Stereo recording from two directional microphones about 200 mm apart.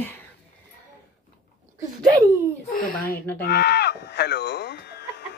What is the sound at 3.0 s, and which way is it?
Speech, 10° left (ahead or behind).